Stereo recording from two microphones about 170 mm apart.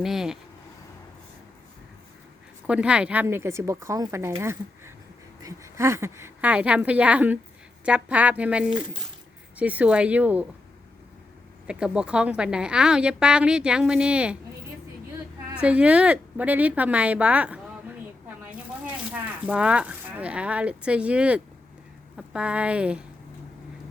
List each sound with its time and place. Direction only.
0.0 s a woman's voice: centre (ahead or behind)
2.6 s a woman's voice: 5° right (ahead or behind)
11.7 s a woman's voice: 5° right (ahead or behind)
15.5 s a woman's voice: 5° right (ahead or behind)